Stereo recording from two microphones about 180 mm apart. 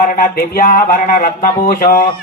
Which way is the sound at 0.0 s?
55° left (ahead or behind).